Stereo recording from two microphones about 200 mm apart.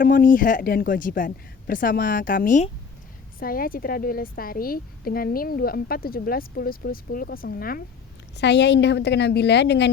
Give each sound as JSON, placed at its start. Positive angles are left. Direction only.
{"t": 0.0, "sound": "a woman's voice", "side_deg": 45}
{"t": 8.4, "sound": "a woman's voice", "side_deg": 60}